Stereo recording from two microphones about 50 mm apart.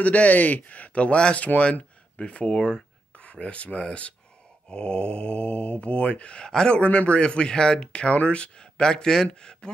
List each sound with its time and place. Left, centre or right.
0.0 s speech: left